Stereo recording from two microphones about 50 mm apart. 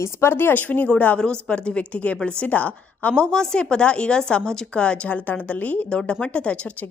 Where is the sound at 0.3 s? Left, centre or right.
Left.